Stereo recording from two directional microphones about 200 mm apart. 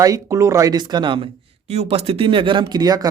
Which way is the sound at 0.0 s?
15° right (ahead or behind).